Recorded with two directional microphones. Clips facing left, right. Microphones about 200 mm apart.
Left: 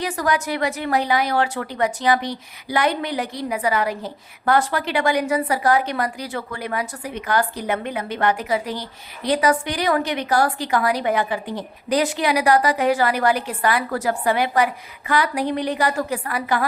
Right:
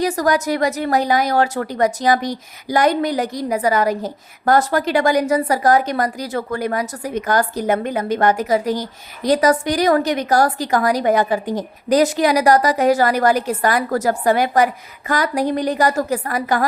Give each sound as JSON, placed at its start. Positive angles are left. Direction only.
{"t": 0.0, "sound": "speech", "side_deg": -40}